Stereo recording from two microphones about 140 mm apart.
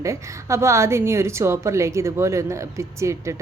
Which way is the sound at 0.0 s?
20° right (ahead or behind).